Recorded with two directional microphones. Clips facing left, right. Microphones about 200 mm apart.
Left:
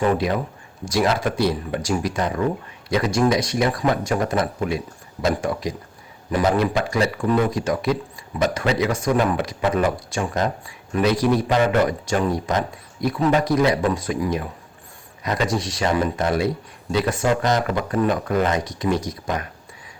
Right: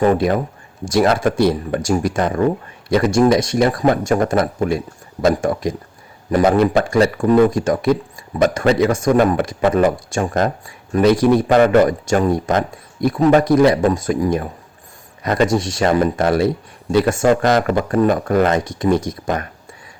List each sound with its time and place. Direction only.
0.0 s speech: 50° right (ahead or behind)